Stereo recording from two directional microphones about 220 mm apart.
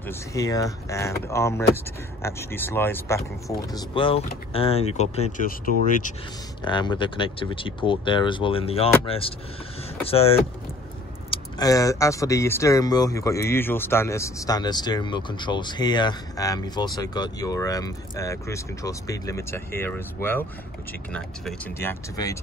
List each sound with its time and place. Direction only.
0.0 s speech: 10° left (ahead or behind)
3.4 s speech: 20° left (ahead or behind)
6.6 s speech: 20° left (ahead or behind)